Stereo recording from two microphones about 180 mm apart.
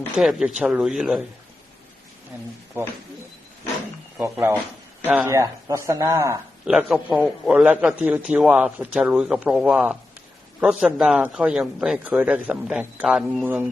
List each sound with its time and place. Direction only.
0.2 s a man's voice: centre (ahead or behind)
4.2 s a man's voice: 15° right (ahead or behind)
6.7 s a man's voice: 5° right (ahead or behind)